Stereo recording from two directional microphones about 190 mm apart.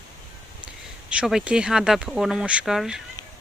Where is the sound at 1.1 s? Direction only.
5° right (ahead or behind).